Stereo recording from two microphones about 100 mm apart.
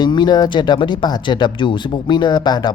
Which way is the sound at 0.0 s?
45° left (ahead or behind).